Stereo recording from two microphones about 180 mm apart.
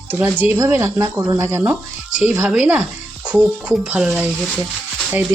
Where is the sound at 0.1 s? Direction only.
10° right (ahead or behind).